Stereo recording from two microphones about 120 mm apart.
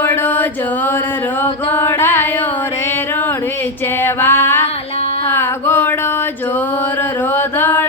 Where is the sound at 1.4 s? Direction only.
20° left (ahead or behind).